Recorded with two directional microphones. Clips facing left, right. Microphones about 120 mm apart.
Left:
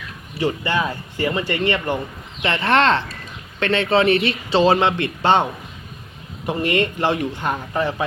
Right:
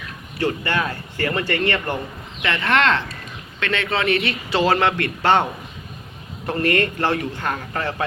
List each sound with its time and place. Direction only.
0.3 s speech: 15° left (ahead or behind)
2.4 s a man's voice: 30° left (ahead or behind); by 8.0 s 15° left (ahead or behind)